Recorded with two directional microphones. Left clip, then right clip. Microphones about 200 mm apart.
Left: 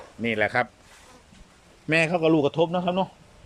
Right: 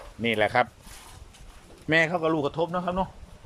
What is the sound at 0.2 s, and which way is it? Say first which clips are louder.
Speech: right 1 dB; centre (ahead or behind).